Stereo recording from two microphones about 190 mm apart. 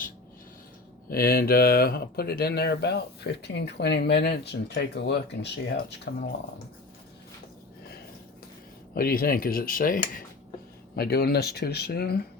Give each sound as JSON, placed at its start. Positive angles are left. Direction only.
{"t": 1.1, "sound": "speech", "side_deg": 50}
{"t": 9.0, "sound": "speech", "side_deg": 50}